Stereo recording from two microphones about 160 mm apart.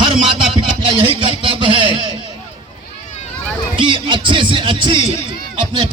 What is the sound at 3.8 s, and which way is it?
Music, 30° right (ahead or behind).